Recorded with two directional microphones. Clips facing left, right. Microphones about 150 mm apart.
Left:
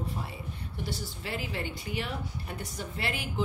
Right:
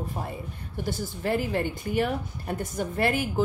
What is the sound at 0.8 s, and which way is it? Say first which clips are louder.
Speech: right 8 dB; 50° right (ahead or behind).